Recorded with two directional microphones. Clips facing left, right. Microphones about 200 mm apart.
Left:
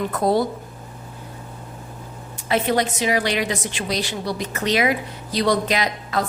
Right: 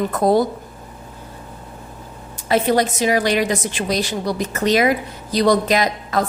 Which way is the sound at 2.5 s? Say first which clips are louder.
Right 3 dB; 40° right (ahead or behind).